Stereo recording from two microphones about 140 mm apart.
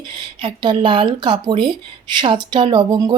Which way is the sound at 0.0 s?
35° right (ahead or behind).